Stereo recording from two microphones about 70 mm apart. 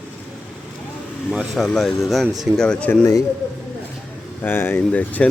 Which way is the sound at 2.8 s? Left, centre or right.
Left.